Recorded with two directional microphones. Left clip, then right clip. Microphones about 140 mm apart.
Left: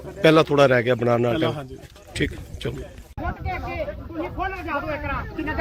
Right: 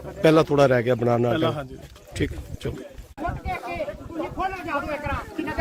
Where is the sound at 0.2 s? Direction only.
15° right (ahead or behind).